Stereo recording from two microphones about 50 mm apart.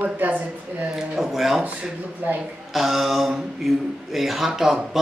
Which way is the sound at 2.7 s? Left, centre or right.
Centre.